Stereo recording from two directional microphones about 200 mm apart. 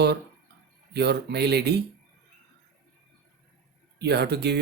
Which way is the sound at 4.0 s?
55° right (ahead or behind).